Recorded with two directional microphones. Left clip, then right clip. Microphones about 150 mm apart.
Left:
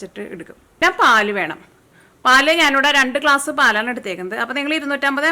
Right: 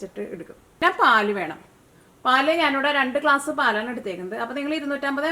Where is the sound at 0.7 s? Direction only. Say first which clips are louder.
Left 4 dB; 20° left (ahead or behind).